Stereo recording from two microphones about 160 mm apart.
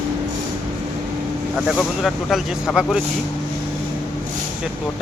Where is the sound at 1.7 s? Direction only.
Centre (ahead or behind).